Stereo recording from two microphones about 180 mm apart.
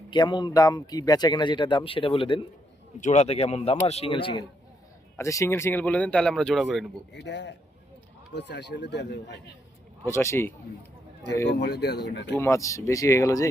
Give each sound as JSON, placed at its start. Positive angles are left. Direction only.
{"t": 0.1, "sound": "speech", "side_deg": 25}
{"t": 3.0, "sound": "speech", "side_deg": 40}
{"t": 5.1, "sound": "speech", "side_deg": 15}
{"t": 7.1, "sound": "speech", "side_deg": 75}
{"t": 10.1, "sound": "speech", "side_deg": 15}
{"t": 11.4, "sound": "speech", "side_deg": 70}
{"t": 12.2, "sound": "speech", "side_deg": 15}